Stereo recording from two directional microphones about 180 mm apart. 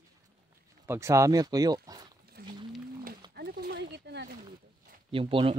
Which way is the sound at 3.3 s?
65° right (ahead or behind).